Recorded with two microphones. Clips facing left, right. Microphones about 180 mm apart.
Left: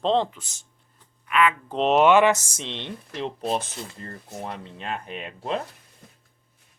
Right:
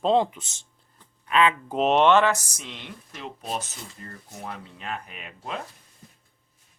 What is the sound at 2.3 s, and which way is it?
Speech, 25° left (ahead or behind).